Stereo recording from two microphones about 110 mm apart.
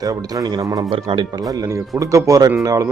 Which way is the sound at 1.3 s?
35° right (ahead or behind).